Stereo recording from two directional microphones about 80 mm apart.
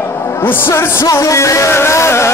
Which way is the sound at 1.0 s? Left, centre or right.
Left.